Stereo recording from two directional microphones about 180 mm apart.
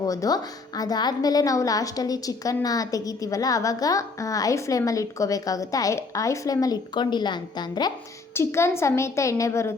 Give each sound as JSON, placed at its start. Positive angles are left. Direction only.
{"t": 0.0, "sound": "a woman's voice", "side_deg": 20}